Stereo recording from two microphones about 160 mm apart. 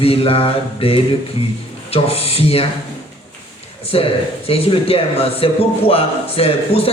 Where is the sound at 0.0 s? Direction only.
35° left (ahead or behind).